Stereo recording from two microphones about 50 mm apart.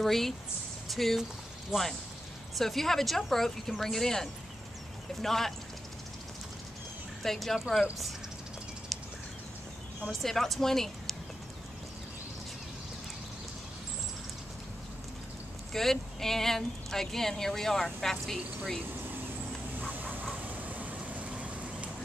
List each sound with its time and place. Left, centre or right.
0.0 s speech: centre
1.7 s speech: centre
2.5 s speech: centre
7.2 s speech: centre
10.2 s speech: centre
15.7 s speech: centre
19.8 s vehicle: right